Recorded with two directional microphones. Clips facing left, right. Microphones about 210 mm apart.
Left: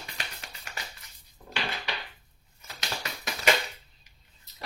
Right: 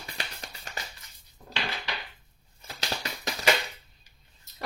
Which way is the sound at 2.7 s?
30° right (ahead or behind).